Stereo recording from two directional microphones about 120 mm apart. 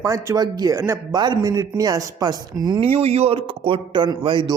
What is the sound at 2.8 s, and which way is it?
A man's voice, 55° right (ahead or behind).